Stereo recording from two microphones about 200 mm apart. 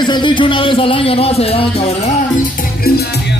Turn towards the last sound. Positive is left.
turn(degrees=30)  # may be behind; listen again after turning